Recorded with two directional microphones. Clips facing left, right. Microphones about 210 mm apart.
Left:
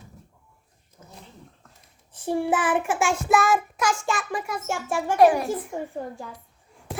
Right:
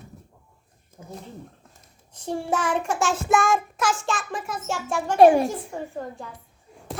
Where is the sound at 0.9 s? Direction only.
50° right (ahead or behind).